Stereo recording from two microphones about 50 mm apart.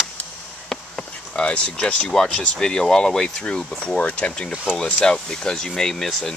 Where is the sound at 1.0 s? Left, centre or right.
Left.